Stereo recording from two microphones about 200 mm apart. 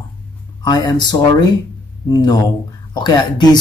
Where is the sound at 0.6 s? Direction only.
20° left (ahead or behind).